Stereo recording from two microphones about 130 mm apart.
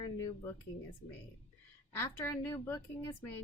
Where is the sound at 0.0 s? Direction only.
30° left (ahead or behind).